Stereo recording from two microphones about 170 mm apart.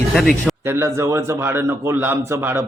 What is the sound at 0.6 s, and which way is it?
A man's voice, 15° right (ahead or behind).